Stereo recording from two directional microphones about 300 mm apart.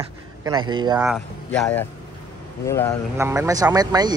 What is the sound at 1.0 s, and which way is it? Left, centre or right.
A man's voice, centre.